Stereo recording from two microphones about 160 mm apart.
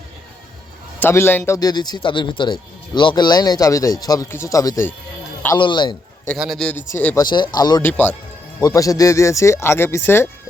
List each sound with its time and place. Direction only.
0.9 s a man's voice: 15° left (ahead or behind)
1.5 s speech: 25° left (ahead or behind)
5.5 s speech: 30° left (ahead or behind)
6.3 s speech: centre (ahead or behind)
7.2 s speech: 30° left (ahead or behind)
7.8 s speech: 10° left (ahead or behind)